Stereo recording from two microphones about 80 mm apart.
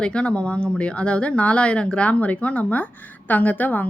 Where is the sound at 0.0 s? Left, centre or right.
Centre.